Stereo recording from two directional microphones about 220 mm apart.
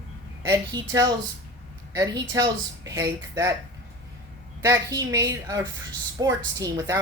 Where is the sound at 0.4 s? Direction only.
15° right (ahead or behind).